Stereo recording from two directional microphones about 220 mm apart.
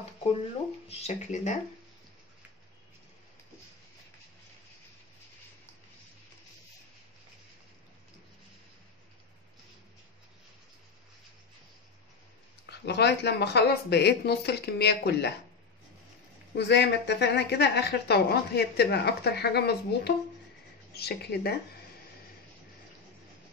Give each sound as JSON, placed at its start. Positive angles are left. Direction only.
{"t": 0.8, "sound": "speech", "side_deg": 30}
{"t": 12.6, "sound": "a woman's voice", "side_deg": 50}
{"t": 16.5, "sound": "a woman's voice", "side_deg": 50}